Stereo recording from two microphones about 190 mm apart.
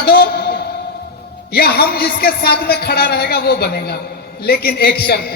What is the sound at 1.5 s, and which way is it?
A man's voice, 55° left (ahead or behind).